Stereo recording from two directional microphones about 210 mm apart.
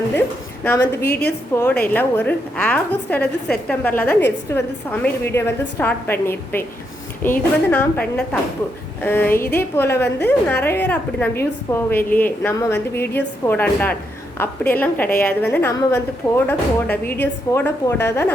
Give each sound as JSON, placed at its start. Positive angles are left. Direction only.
{"t": 0.6, "sound": "a woman's voice", "side_deg": 10}
{"t": 1.0, "sound": "a woman's voice", "side_deg": 50}
{"t": 1.5, "sound": "a woman's voice", "side_deg": 10}